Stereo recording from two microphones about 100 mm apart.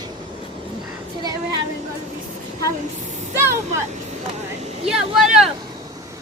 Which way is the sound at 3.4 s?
25° right (ahead or behind).